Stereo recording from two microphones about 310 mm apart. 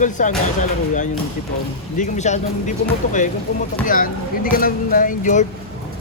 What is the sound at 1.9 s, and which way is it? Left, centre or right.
Speech, left.